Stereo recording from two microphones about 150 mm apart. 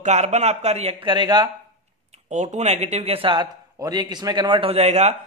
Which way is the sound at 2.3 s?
50° right (ahead or behind).